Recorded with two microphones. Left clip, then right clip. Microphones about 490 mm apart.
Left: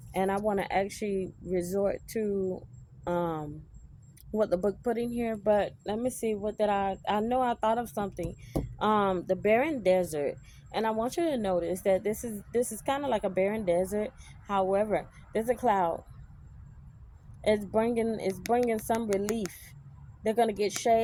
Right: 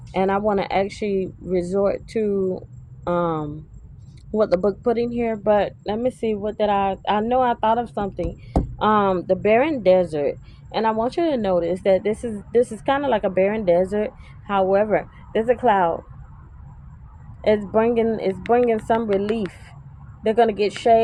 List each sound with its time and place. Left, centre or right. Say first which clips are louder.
0.1 s speech: right 9 dB; left
17.4 s speech: right 9 dB; left
19.1 s speech: right 8 dB; left
20.2 s speech: right 9 dB; left